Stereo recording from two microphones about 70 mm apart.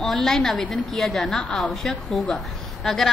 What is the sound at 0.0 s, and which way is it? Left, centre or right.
A woman's voice, centre.